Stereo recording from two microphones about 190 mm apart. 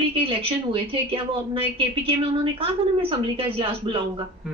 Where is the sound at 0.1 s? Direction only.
30° right (ahead or behind).